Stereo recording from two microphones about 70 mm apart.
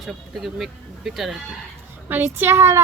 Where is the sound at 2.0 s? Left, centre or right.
Right.